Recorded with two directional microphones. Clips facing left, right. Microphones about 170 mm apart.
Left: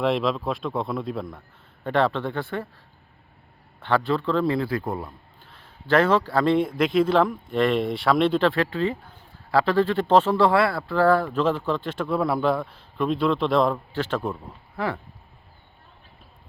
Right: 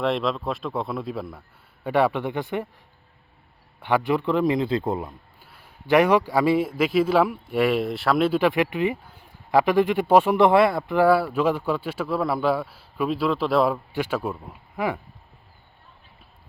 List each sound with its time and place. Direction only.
0.0 s a man's voice: centre (ahead or behind); by 2.6 s 15° right (ahead or behind)
3.8 s a man's voice: 15° right (ahead or behind)
5.4 s a man's voice: 10° right (ahead or behind)